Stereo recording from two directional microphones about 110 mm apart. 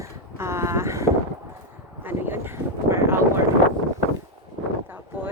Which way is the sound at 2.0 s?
20° right (ahead or behind).